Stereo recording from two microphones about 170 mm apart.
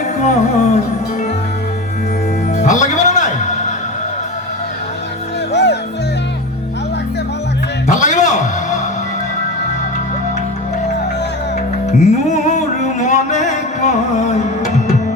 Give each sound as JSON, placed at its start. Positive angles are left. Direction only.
{"t": 0.2, "sound": "music", "side_deg": 45}
{"t": 2.6, "sound": "music", "side_deg": 45}
{"t": 7.9, "sound": "music", "side_deg": 45}
{"t": 11.9, "sound": "music", "side_deg": 40}